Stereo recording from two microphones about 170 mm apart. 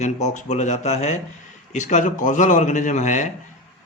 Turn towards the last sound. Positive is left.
turn(degrees=45)  # may be behind; listen again after turning